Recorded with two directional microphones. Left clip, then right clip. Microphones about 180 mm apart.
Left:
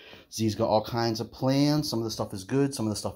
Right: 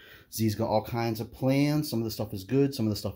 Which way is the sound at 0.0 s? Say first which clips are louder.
Left 1 dB; 20° right (ahead or behind).